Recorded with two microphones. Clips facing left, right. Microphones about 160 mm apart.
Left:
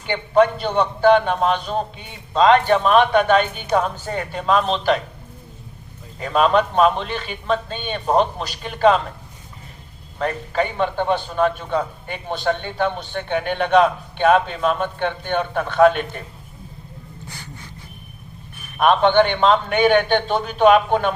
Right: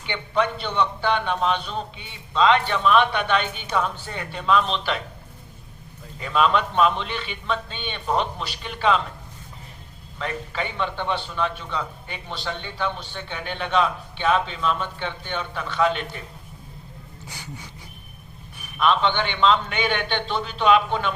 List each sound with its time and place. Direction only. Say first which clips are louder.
0.0 s a man's voice: left 8 dB; 45° left (ahead or behind)
6.1 s a man's voice: left 4 dB; 45° left (ahead or behind)
10.2 s a man's voice: left 7 dB; 45° left (ahead or behind)
17.2 s a sound: right 1 dB; 10° right (ahead or behind)
18.8 s a man's voice: left 7 dB; 50° left (ahead or behind)